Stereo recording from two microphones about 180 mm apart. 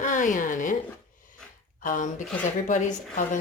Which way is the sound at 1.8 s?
45° left (ahead or behind).